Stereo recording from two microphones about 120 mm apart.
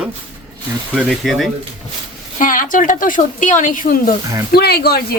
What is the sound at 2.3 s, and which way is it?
A woman's voice, 90° left.